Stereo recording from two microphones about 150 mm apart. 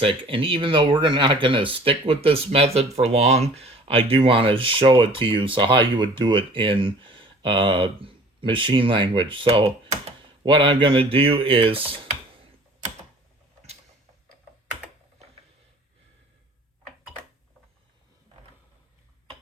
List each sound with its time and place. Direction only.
0.0 s speech: 35° right (ahead or behind)